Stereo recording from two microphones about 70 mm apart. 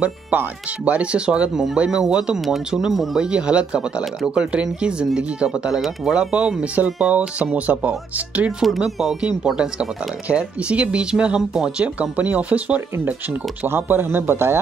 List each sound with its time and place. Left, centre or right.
0.0 s speech: right; by 3.3 s centre
3.3 s speech: centre
8.6 s speech: centre; by 12.8 s right
12.9 s speech: right